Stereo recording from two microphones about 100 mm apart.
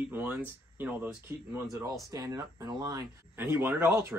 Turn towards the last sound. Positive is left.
turn(degrees=-25)  # may be behind; listen again after turning